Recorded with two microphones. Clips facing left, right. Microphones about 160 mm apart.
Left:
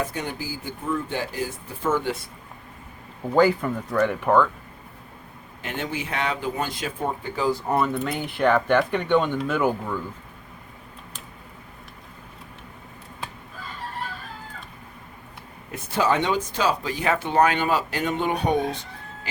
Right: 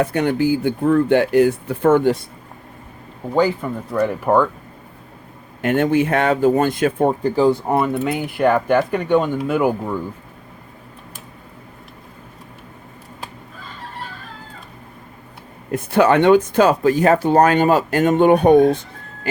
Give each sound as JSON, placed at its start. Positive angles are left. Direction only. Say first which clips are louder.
{"t": 0.0, "sound": "speech", "louder": "right 12 dB", "side_deg": -65}
{"t": 3.3, "sound": "speech", "louder": "right 1 dB", "side_deg": -5}
{"t": 5.6, "sound": "speech", "louder": "right 14 dB", "side_deg": -55}
{"t": 7.2, "sound": "speech", "louder": "right 9 dB", "side_deg": -35}
{"t": 7.7, "sound": "speech", "louder": "right 5 dB", "side_deg": -10}
{"t": 15.7, "sound": "speech", "louder": "right 8 dB", "side_deg": -60}